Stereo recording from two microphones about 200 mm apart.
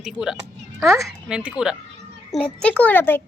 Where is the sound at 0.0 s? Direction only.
5° right (ahead or behind).